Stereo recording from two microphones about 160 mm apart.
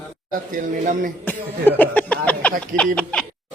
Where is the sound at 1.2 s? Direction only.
10° left (ahead or behind).